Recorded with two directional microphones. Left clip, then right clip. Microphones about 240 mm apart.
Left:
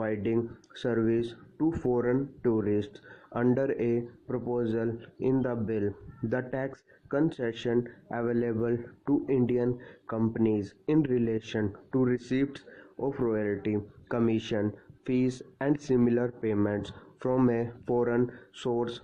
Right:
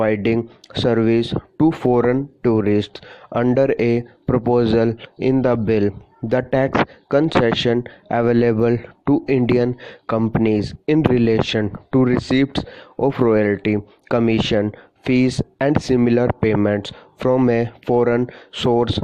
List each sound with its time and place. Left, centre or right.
0.0 s speech: right